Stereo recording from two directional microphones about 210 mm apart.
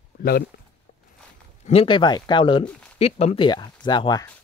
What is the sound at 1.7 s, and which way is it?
Speech, 25° left (ahead or behind).